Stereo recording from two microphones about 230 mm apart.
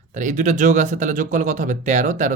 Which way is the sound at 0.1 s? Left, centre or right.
Right.